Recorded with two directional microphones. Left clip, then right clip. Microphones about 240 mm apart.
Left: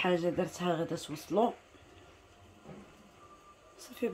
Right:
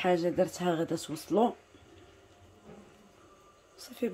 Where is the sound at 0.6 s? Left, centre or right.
Centre.